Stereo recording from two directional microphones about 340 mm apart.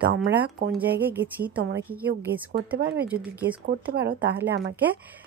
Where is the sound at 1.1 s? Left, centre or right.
Centre.